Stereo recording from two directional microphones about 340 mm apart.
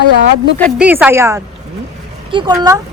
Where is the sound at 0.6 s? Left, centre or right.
Centre.